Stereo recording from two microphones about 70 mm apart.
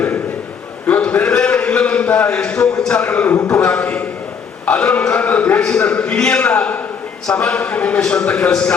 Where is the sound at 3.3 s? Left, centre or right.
Left.